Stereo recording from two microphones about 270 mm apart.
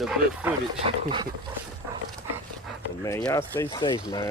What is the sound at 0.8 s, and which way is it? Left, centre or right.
Speech, centre.